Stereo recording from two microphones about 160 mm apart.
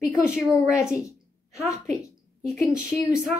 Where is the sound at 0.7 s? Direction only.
20° left (ahead or behind).